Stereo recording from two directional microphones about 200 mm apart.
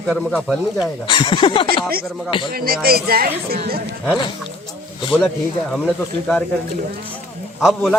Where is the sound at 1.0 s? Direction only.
25° left (ahead or behind).